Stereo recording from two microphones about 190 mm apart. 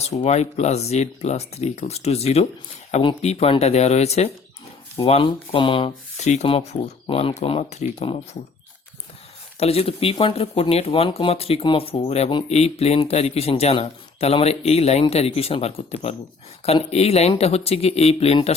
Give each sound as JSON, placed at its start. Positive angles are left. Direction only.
{"t": 0.3, "sound": "speech", "side_deg": 35}
{"t": 9.6, "sound": "speech", "side_deg": 30}